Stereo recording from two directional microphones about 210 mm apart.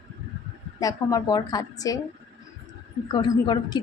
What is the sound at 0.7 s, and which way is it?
A woman's voice, 15° left (ahead or behind).